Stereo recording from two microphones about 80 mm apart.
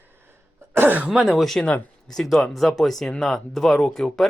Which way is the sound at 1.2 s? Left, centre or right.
Centre.